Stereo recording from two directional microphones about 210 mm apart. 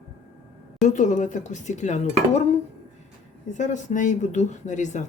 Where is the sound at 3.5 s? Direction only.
35° left (ahead or behind).